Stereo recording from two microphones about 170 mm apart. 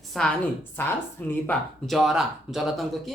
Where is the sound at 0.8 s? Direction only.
15° left (ahead or behind).